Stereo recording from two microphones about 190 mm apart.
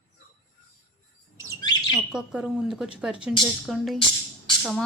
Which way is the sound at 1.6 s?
20° left (ahead or behind).